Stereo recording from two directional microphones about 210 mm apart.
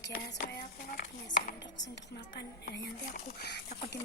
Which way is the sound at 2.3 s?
50° left (ahead or behind).